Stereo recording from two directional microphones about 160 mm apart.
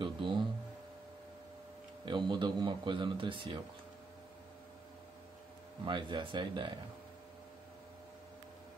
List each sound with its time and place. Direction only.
0.0 s a sound: 30° right (ahead or behind)
2.0 s a man's voice: 30° right (ahead or behind)
5.9 s a man's voice: 30° right (ahead or behind)